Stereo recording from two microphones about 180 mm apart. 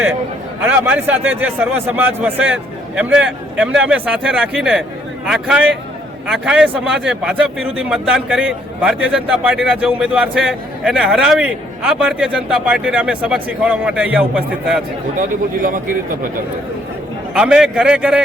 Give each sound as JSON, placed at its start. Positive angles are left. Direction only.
{"t": 0.6, "sound": "a man's voice", "side_deg": -10}
{"t": 15.2, "sound": "a man's voice", "side_deg": -50}
{"t": 17.3, "sound": "a man's voice", "side_deg": -5}